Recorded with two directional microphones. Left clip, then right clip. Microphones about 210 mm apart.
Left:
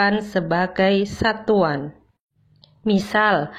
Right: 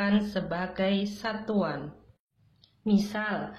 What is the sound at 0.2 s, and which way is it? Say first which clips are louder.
A woman's voice: left 11 dB; 35° left (ahead or behind).